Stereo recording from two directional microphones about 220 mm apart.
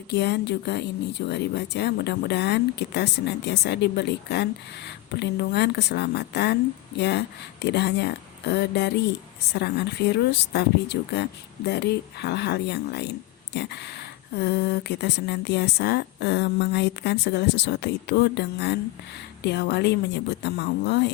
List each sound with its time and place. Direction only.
0.1 s speech: 50° left (ahead or behind)